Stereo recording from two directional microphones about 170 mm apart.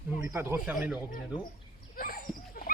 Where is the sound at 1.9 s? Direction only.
55° left (ahead or behind).